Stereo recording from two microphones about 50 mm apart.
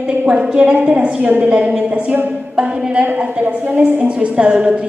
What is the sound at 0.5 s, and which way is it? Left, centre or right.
A woman's voice, centre.